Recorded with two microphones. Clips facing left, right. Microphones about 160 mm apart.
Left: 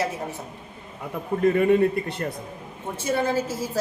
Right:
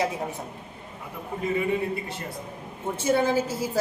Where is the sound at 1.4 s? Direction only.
55° left (ahead or behind).